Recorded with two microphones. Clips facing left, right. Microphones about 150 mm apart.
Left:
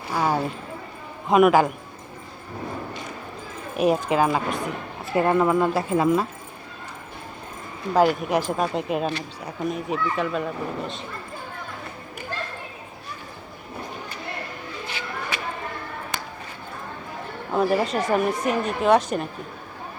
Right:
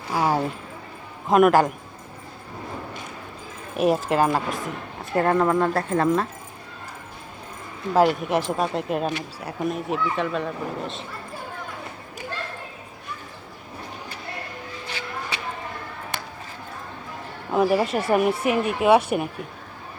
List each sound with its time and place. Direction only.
0.1 s a sound: 10° right (ahead or behind)
1.3 s speech: centre (ahead or behind)
3.8 s speech: centre (ahead or behind)
7.9 s speech: centre (ahead or behind)
9.0 s speech: 15° right (ahead or behind)
9.5 s speech: centre (ahead or behind)
17.5 s a sound: 5° right (ahead or behind)
17.9 s speech: 10° right (ahead or behind)